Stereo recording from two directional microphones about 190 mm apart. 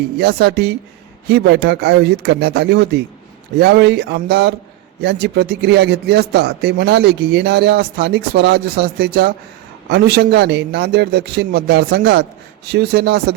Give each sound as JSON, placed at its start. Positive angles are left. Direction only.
{"t": 0.2, "sound": "a man's voice", "side_deg": -60}